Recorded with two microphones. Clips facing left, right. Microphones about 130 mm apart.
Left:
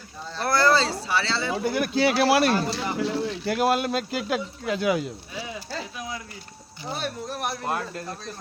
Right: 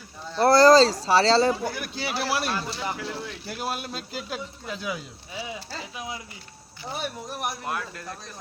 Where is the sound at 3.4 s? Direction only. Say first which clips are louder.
Left 10 dB; 85° left.